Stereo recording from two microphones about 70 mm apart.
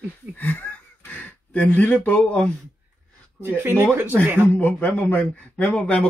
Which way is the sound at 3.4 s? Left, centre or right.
Right.